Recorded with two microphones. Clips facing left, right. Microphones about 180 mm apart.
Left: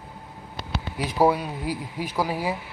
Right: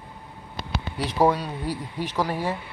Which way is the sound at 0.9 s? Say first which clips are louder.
Even; 10° left (ahead or behind).